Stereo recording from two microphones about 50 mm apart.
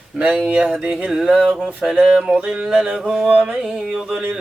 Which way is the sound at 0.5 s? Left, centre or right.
Centre.